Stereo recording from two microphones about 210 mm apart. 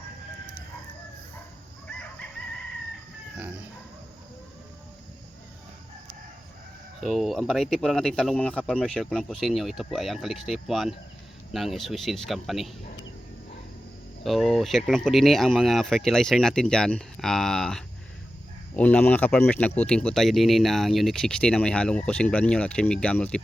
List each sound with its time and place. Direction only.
7.0 s speech: centre (ahead or behind)
14.3 s speech: centre (ahead or behind)